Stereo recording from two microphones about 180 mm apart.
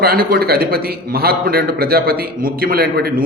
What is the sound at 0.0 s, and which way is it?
A man's voice, 55° right (ahead or behind).